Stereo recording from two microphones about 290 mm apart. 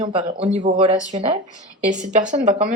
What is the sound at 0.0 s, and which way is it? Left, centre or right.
Speech, centre.